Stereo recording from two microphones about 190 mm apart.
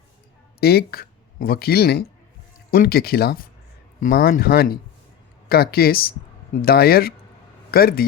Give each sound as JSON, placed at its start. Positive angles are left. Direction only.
{"t": 0.6, "sound": "speech", "side_deg": 55}